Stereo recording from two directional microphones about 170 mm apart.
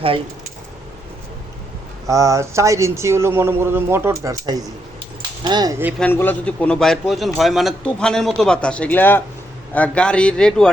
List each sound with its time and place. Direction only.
2.0 s speech: 20° right (ahead or behind)
6.0 s a man's voice: 10° left (ahead or behind)